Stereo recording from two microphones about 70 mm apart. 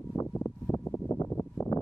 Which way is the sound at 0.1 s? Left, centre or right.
Left.